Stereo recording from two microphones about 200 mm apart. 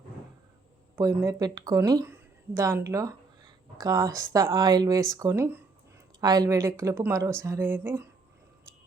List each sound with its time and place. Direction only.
0.9 s speech: 15° right (ahead or behind)